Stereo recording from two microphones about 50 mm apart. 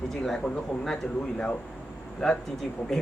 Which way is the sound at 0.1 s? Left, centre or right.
Centre.